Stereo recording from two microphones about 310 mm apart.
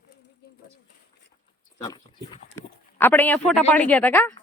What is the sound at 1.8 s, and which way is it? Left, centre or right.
Speech, centre.